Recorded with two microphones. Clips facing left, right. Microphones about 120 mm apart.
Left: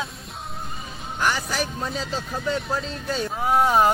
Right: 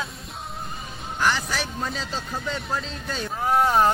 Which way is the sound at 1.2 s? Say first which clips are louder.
Even; 5° left (ahead or behind).